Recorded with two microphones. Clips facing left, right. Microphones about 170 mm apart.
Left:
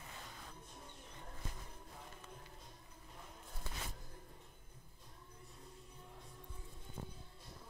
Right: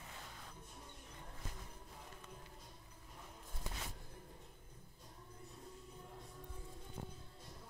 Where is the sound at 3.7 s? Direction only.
15° right (ahead or behind).